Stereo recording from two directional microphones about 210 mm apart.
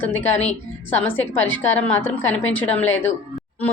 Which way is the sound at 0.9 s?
10° left (ahead or behind).